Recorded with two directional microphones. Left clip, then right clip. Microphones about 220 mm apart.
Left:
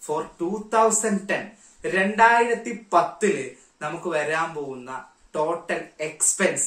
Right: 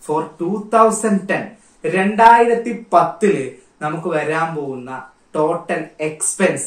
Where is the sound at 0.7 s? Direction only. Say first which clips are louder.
Right 7 dB; 10° left (ahead or behind).